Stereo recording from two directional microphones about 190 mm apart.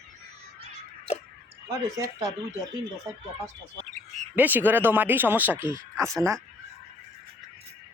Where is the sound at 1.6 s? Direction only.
20° right (ahead or behind).